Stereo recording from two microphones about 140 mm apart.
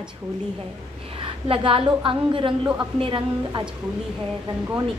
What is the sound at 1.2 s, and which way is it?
A woman's voice, 40° right (ahead or behind).